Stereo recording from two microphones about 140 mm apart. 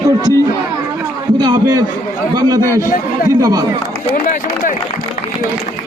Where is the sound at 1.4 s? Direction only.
30° right (ahead or behind).